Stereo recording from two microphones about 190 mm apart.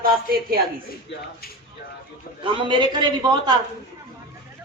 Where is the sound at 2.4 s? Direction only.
25° right (ahead or behind).